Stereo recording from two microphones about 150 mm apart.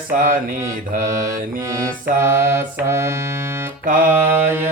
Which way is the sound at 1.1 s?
20° right (ahead or behind).